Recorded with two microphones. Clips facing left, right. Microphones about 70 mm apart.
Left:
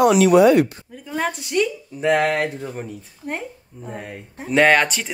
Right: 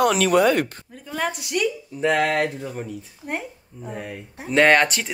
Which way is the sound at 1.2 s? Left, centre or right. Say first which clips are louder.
Left 3 dB; left.